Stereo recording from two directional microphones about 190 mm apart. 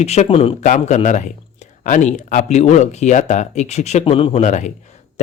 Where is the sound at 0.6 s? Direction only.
40° left (ahead or behind).